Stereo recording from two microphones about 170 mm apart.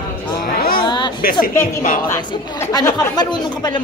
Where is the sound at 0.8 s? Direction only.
25° left (ahead or behind).